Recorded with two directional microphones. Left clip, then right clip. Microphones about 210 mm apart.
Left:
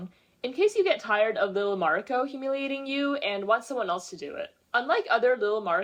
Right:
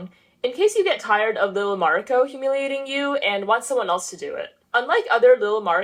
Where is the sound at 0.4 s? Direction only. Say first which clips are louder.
Right 5 dB; 25° left (ahead or behind).